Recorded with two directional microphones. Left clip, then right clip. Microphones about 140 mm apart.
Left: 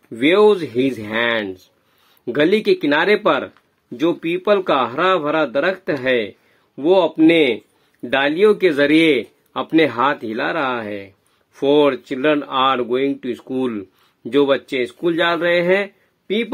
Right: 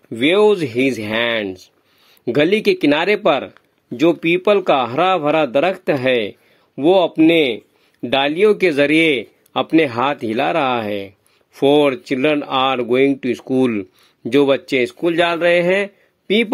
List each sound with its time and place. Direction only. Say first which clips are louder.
0.1 s speech: even; 40° right (ahead or behind)